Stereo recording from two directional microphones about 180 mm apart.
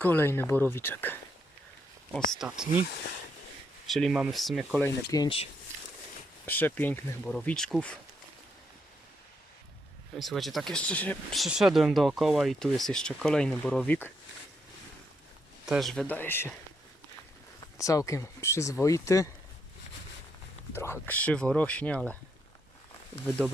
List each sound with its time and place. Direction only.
0.0 s speech: 10° left (ahead or behind)
2.4 s speech: 5° right (ahead or behind)
3.8 s speech: centre (ahead or behind)
4.9 s speech: 20° left (ahead or behind)
6.4 s speech: 10° left (ahead or behind)
10.2 s speech: centre (ahead or behind)
15.6 s speech: centre (ahead or behind)
17.7 s speech: 20° left (ahead or behind)
20.7 s speech: 15° left (ahead or behind)